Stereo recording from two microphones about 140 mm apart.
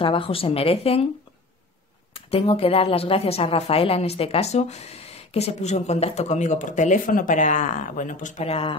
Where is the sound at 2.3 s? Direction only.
45° left (ahead or behind); by 8.4 s 65° left (ahead or behind).